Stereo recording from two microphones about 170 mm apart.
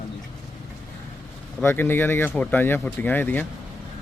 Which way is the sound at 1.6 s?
15° left (ahead or behind).